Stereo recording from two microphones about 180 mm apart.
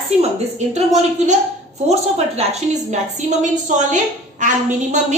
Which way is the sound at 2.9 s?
40° right (ahead or behind).